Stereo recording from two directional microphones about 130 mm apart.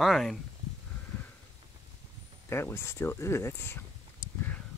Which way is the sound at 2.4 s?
20° left (ahead or behind).